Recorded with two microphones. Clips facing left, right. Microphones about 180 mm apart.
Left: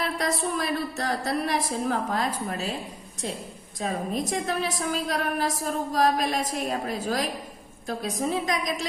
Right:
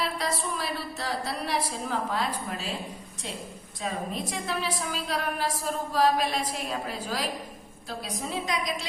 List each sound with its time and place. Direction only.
0.2 s a woman's voice: 45° left (ahead or behind)
3.8 s a woman's voice: 45° left (ahead or behind)